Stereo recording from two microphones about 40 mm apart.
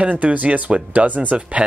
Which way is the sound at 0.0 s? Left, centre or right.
Right.